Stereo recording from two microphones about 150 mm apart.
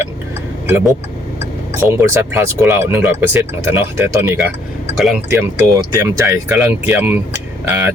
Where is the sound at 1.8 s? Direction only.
15° right (ahead or behind).